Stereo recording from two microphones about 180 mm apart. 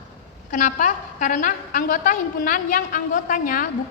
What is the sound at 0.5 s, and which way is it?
A woman's voice, 45° left (ahead or behind).